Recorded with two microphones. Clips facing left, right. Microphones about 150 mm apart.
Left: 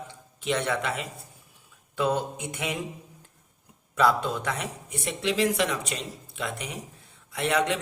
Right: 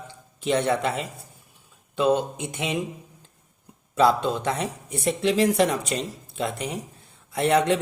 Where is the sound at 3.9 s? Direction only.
25° right (ahead or behind).